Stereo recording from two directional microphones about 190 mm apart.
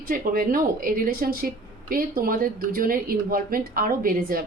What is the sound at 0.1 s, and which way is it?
A woman's voice, 45° right (ahead or behind).